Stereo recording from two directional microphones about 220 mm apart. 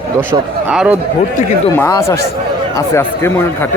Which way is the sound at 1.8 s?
10° left (ahead or behind).